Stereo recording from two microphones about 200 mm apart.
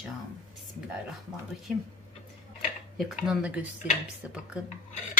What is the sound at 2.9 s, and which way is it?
Speech, centre (ahead or behind).